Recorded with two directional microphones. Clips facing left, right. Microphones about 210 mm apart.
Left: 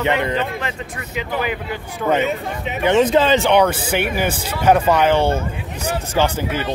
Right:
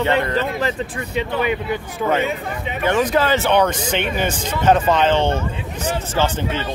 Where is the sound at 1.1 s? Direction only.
25° right (ahead or behind).